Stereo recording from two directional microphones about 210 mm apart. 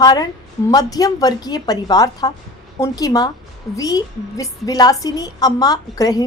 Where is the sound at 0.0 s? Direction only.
20° left (ahead or behind).